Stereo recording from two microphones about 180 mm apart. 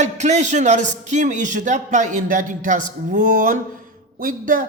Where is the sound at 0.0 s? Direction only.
40° right (ahead or behind).